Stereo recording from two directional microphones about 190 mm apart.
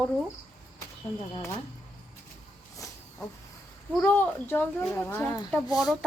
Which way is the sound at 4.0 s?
10° left (ahead or behind).